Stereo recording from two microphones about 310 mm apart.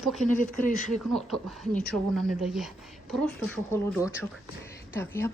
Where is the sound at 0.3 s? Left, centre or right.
Left.